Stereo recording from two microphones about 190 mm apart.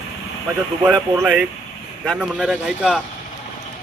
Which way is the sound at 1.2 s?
5° right (ahead or behind).